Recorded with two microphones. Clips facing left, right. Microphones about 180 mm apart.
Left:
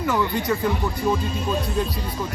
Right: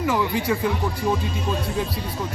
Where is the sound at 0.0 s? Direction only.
5° right (ahead or behind).